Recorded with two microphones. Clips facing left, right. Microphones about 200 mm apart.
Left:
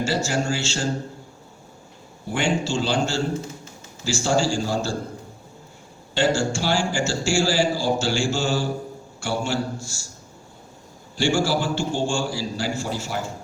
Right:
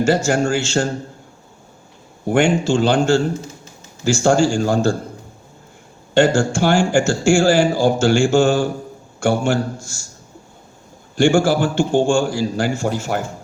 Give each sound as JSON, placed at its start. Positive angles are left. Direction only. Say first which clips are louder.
{"t": 0.0, "sound": "a man's voice", "louder": "right 7 dB", "side_deg": -50}
{"t": 2.2, "sound": "a man's voice", "louder": "right 8 dB", "side_deg": -50}
{"t": 6.1, "sound": "a man's voice", "louder": "right 7 dB", "side_deg": -50}
{"t": 11.2, "sound": "a man's voice", "louder": "right 7 dB", "side_deg": -50}